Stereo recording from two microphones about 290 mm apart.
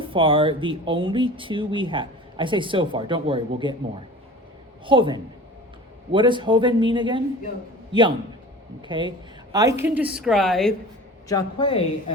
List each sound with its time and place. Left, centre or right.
0.0 s speech: centre
4.9 s speech: centre
8.8 s a woman's voice: centre
11.3 s a woman's voice: centre